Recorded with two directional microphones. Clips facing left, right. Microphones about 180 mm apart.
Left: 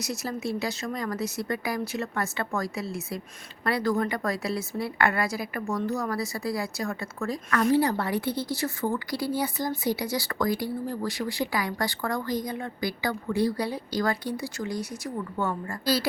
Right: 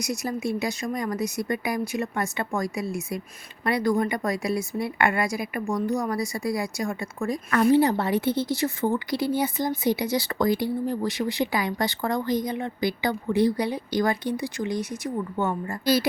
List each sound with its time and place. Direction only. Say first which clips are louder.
0.0 s a woman's voice: right 3 dB; 15° right (ahead or behind)